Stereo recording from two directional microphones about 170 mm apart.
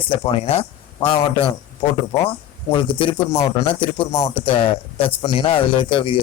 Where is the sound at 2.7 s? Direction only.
30° left (ahead or behind).